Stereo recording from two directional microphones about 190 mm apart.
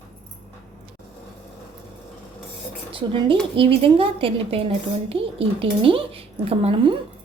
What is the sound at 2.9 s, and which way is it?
A woman's voice, 25° right (ahead or behind).